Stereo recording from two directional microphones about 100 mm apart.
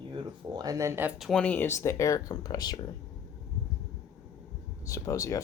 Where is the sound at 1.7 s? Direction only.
25° left (ahead or behind).